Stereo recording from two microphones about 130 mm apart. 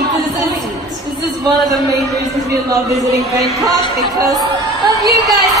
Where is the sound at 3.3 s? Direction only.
25° right (ahead or behind).